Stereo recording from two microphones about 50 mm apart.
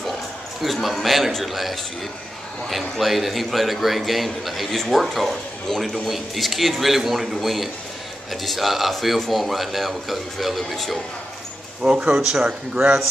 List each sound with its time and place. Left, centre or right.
0.6 s a man's voice: centre
3.0 s a man's voice: centre
11.8 s a man's voice: right
12.2 s a man's voice: centre
12.4 s a man's voice: right